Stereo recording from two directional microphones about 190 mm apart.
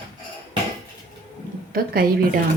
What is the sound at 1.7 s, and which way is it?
Speech, 50° right (ahead or behind).